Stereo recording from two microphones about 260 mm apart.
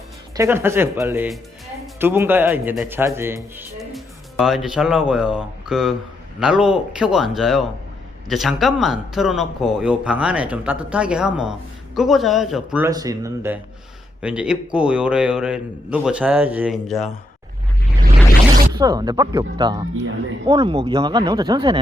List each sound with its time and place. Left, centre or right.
0.3 s a man's voice: centre
18.7 s speech: centre